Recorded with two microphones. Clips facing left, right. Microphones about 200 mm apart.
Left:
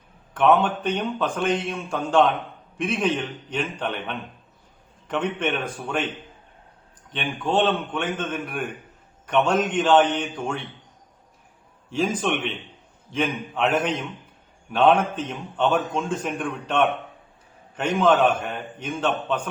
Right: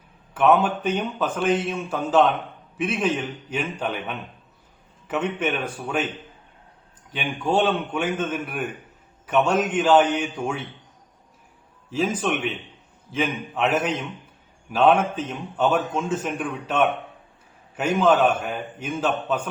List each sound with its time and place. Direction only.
0.3 s a man's voice: 5° right (ahead or behind)
7.1 s a man's voice: 10° right (ahead or behind)
11.9 s a man's voice: 5° right (ahead or behind)